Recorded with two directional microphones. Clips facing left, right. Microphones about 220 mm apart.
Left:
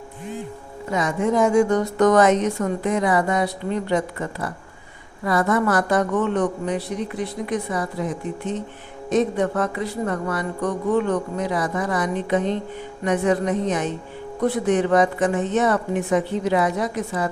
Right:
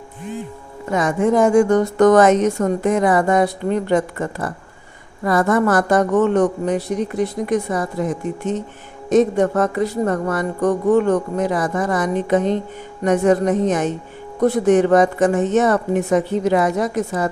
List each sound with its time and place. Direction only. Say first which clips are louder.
0.9 s speech: right 4 dB; 50° right (ahead or behind)